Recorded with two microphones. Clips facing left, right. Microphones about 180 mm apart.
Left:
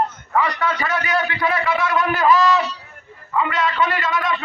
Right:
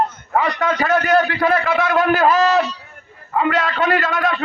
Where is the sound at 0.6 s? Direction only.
40° right (ahead or behind).